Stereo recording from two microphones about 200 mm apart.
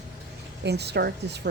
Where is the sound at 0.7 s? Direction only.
55° right (ahead or behind).